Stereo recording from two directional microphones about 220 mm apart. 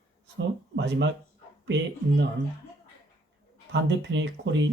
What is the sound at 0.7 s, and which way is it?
Speech, 55° right (ahead or behind).